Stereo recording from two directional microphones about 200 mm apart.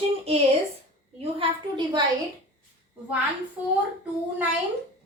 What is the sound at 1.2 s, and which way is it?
Speech, 25° right (ahead or behind).